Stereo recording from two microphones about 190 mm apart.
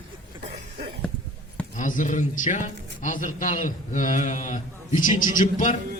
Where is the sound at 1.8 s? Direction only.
45° left (ahead or behind).